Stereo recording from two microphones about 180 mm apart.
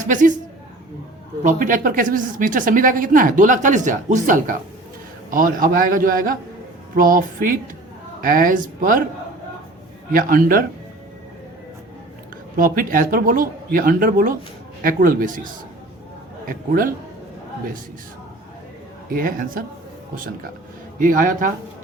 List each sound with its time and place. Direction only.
0.0 s speech: 45° right (ahead or behind)
1.5 s speech: 50° right (ahead or behind)
10.1 s speech: 50° right (ahead or behind)
12.5 s speech: 50° right (ahead or behind)
16.5 s speech: 50° right (ahead or behind)
19.0 s speech: 55° right (ahead or behind)
21.0 s speech: 50° right (ahead or behind)